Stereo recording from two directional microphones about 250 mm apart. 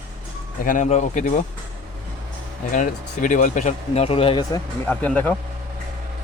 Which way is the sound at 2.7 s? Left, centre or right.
Left.